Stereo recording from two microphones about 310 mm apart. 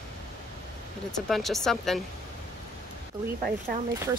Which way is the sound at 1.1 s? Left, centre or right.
Centre.